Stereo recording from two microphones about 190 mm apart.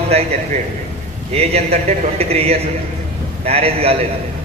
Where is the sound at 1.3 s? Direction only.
35° right (ahead or behind).